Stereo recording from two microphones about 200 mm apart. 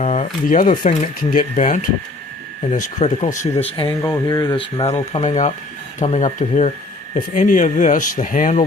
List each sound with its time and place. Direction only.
0.0 s a sound: 35° left (ahead or behind)
0.9 s speech: 40° left (ahead or behind)
3.8 s speech: 15° left (ahead or behind); by 8.6 s 40° left (ahead or behind)